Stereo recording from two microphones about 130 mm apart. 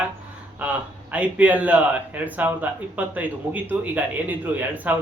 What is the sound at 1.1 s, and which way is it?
Speech, 10° right (ahead or behind).